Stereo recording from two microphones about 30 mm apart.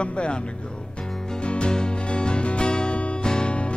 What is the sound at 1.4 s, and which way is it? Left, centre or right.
Music, left.